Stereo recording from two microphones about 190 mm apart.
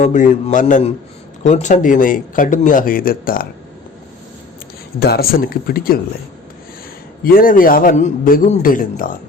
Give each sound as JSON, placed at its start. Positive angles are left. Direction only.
{"t": 0.0, "sound": "a man's voice", "side_deg": 40}
{"t": 4.9, "sound": "speech", "side_deg": 55}
{"t": 7.3, "sound": "speech", "side_deg": 45}